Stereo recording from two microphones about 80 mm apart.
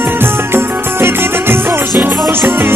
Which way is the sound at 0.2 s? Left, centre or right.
Right.